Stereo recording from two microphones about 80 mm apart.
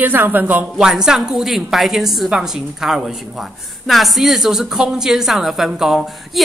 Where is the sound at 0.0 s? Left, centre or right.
Right.